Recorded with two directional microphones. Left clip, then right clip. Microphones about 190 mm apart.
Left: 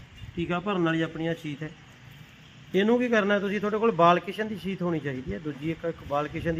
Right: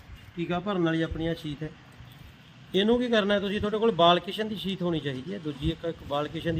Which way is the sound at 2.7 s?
15° right (ahead or behind).